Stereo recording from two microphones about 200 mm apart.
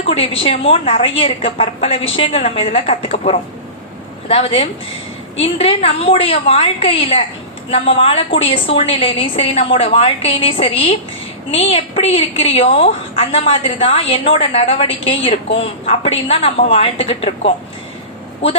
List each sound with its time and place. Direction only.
0.0 s a woman's voice: 30° left (ahead or behind)